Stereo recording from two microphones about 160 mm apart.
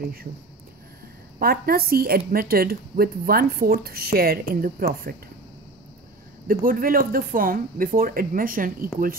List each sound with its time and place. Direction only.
1.4 s a woman's voice: 70° right (ahead or behind)
6.4 s speech: 60° right (ahead or behind)